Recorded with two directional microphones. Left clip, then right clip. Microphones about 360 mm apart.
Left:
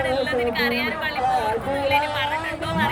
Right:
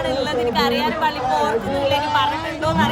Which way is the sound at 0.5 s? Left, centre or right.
Centre.